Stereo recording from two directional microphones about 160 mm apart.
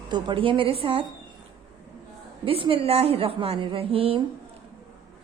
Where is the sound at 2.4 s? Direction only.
35° right (ahead or behind).